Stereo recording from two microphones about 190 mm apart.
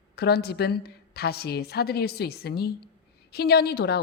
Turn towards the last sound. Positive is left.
turn(degrees=60)  # may be behind; listen again after turning